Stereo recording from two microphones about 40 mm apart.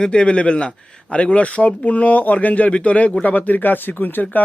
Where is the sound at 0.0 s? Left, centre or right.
Left.